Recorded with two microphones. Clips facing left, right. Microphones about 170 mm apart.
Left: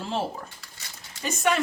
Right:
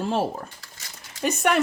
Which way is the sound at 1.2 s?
60° right (ahead or behind).